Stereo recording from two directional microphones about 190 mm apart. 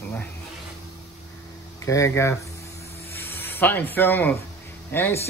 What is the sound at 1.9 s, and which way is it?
Speech, 15° left (ahead or behind).